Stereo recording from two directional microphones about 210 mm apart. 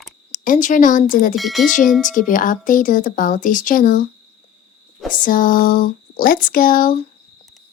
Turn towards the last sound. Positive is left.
turn(degrees=40)  # may be behind; listen again after turning